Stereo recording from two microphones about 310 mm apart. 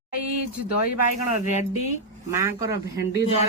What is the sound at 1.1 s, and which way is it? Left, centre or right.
Speech, right.